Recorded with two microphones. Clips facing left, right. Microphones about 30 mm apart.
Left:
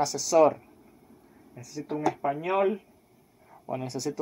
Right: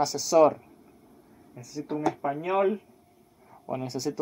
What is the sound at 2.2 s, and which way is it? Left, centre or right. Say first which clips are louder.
Speech: even; centre.